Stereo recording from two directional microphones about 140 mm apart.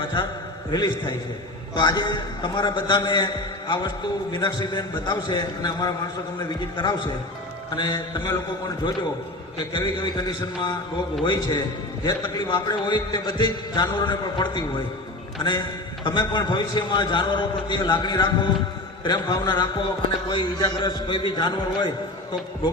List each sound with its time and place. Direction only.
0.0 s a man's voice: 35° left (ahead or behind)
7.8 s music: 30° left (ahead or behind)
9.7 s a man's voice: 35° left (ahead or behind)